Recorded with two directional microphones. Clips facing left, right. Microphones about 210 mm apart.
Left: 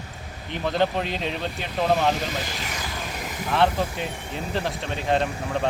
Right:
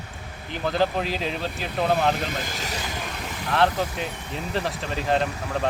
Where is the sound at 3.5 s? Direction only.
Centre (ahead or behind).